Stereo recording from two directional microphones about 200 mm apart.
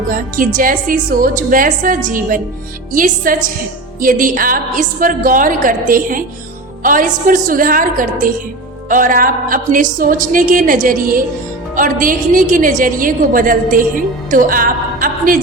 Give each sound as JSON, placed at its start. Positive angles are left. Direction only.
{"t": 0.1, "sound": "a woman's voice", "side_deg": -45}